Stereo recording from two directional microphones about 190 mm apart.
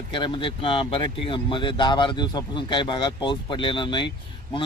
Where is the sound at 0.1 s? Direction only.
25° left (ahead or behind).